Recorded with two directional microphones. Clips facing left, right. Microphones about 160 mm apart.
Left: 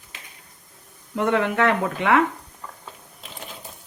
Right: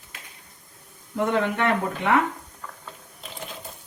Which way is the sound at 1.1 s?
85° left.